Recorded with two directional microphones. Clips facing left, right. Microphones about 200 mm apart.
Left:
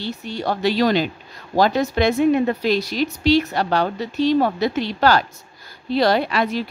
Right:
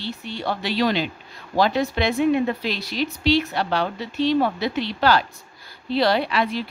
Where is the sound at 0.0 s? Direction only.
45° left (ahead or behind).